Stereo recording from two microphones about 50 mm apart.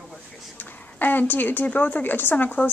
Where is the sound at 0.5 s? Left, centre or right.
Left.